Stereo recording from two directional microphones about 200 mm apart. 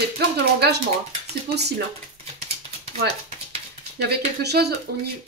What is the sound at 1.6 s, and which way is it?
Speech, 55° right (ahead or behind).